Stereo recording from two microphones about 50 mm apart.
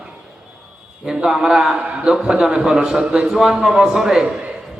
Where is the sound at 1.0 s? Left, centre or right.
Centre.